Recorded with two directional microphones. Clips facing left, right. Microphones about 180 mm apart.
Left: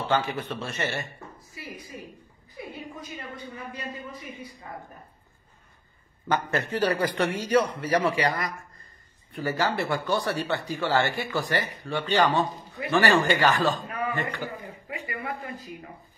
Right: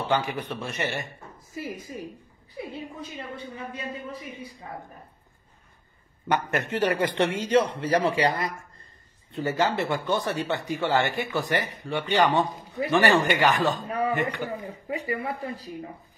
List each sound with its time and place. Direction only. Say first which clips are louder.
0.0 s a man's voice: even; 15° right (ahead or behind)
1.5 s a woman's voice: right 7 dB; 45° right (ahead or behind)
6.3 s a man's voice: even; 20° right (ahead or behind)
14.9 s speech: right 5 dB; 35° right (ahead or behind)